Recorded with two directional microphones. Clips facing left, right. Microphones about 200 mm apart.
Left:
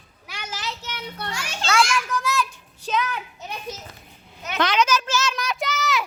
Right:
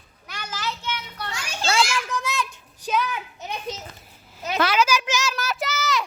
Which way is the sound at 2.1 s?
20° right (ahead or behind).